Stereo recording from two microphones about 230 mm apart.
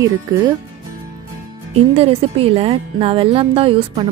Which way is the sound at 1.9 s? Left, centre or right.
Right.